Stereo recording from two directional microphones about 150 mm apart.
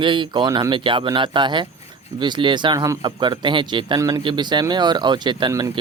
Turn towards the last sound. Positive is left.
turn(degrees=-30)  # may be behind; listen again after turning